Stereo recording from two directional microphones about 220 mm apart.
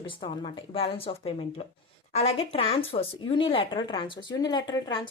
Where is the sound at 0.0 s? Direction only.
25° left (ahead or behind).